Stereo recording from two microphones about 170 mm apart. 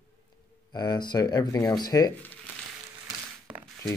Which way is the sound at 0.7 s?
25° left (ahead or behind).